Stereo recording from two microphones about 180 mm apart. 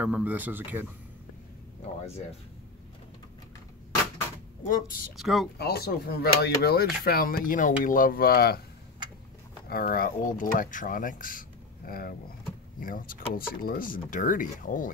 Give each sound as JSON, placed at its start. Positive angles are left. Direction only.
{"t": 0.0, "sound": "speech", "side_deg": -10}
{"t": 4.6, "sound": "speech", "side_deg": 50}
{"t": 5.1, "sound": "speech", "side_deg": 0}
{"t": 5.6, "sound": "speech", "side_deg": 60}
{"t": 9.7, "sound": "speech", "side_deg": 55}